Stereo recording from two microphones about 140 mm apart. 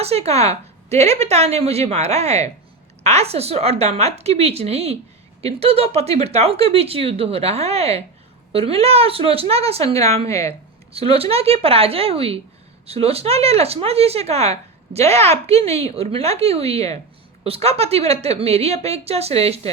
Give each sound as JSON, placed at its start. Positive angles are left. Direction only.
{"t": 0.0, "sound": "speech", "side_deg": -50}
{"t": 10.2, "sound": "speech", "side_deg": 20}
{"t": 10.9, "sound": "speech", "side_deg": -45}